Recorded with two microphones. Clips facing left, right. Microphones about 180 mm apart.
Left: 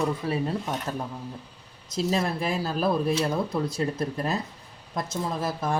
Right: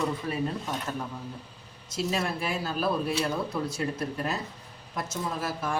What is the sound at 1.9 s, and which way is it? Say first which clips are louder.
A woman's voice: left 3 dB; 35° left (ahead or behind).